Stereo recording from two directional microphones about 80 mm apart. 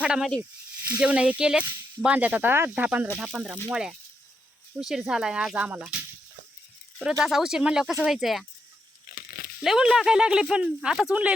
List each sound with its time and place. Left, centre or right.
0.0 s speech: centre
3.2 s speech: centre
7.1 s speech: centre
9.6 s speech: centre